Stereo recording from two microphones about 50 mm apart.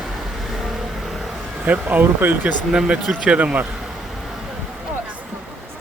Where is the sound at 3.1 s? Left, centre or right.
Right.